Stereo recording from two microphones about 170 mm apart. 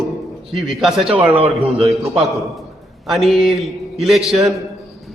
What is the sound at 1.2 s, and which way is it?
Speech, 35° right (ahead or behind).